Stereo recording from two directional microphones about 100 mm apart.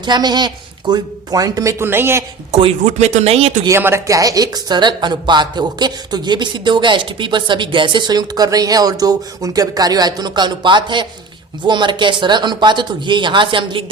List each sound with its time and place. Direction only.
0.0 s speech: 45° right (ahead or behind)
1.8 s a man's voice: 25° right (ahead or behind)
2.5 s speech: 80° right
3.7 s speech: 25° right (ahead or behind); by 13.9 s 60° right (ahead or behind)